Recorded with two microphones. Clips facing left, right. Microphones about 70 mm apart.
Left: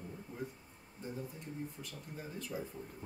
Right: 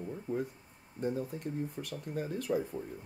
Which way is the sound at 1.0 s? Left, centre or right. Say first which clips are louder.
Right 10 dB; right.